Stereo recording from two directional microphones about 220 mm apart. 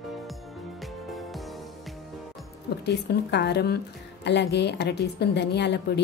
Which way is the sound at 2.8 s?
50° left (ahead or behind).